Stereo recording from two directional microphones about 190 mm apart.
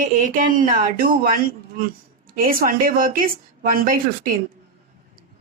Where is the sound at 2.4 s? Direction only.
50° right (ahead or behind).